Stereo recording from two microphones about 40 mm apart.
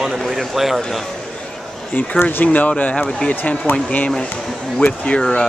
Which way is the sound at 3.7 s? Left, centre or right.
Left.